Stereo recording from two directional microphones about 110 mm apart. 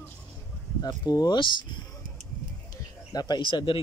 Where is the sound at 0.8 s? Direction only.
35° left (ahead or behind).